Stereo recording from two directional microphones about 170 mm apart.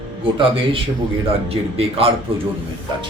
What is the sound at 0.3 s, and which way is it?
Speech, 30° right (ahead or behind).